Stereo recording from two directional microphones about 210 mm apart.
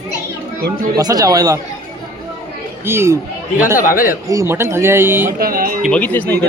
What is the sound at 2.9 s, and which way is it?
Speech, 10° right (ahead or behind).